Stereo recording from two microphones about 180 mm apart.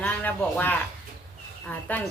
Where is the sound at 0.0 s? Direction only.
10° left (ahead or behind).